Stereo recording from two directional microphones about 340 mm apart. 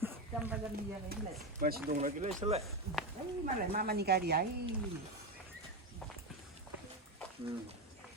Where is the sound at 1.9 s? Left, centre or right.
Right.